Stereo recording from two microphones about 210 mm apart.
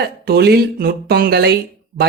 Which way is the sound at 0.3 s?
50° right (ahead or behind).